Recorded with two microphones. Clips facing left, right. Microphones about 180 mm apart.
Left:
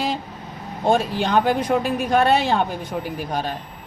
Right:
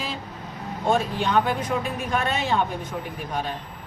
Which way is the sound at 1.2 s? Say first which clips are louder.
Left 4 dB; 80° left.